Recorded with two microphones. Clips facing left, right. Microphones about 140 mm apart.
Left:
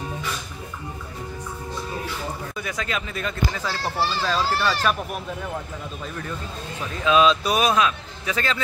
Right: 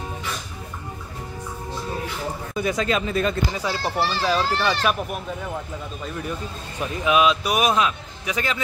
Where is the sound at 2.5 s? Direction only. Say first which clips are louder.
Right 10 dB; 25° right (ahead or behind).